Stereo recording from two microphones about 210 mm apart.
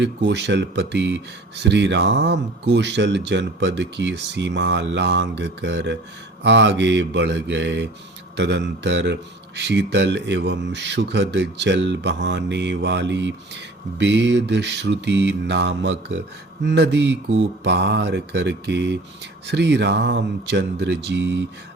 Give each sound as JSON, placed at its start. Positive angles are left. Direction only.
{"t": 0.0, "sound": "speech", "side_deg": -55}